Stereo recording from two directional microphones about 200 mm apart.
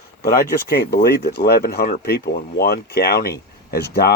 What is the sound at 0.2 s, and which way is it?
Speech, 50° left (ahead or behind).